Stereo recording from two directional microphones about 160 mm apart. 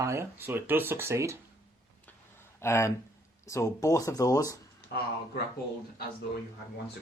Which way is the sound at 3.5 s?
20° left (ahead or behind).